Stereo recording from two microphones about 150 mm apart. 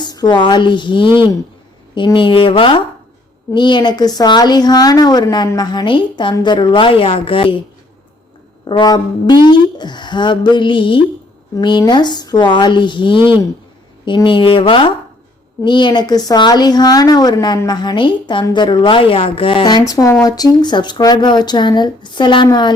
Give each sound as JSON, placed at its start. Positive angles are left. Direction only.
{"t": 0.0, "sound": "a woman's voice", "side_deg": 30}
{"t": 8.6, "sound": "a woman's voice", "side_deg": 30}